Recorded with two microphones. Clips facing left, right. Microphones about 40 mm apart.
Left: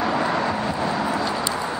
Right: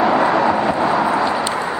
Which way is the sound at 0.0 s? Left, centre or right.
Right.